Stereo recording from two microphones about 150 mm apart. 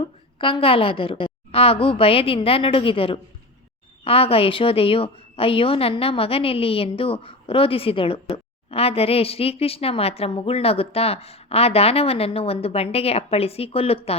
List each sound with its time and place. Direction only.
0.0 s a woman's voice: 35° left (ahead or behind)